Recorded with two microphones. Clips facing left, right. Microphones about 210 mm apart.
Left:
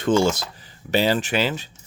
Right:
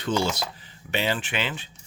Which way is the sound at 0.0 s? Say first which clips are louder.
Left 7 dB; 50° left (ahead or behind).